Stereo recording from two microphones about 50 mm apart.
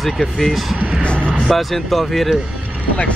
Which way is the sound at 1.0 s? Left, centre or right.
Left.